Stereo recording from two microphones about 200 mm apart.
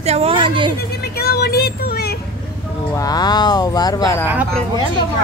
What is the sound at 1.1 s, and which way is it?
Vehicle, 50° left (ahead or behind).